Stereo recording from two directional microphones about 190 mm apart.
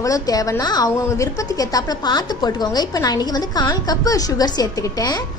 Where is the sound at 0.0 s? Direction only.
20° left (ahead or behind).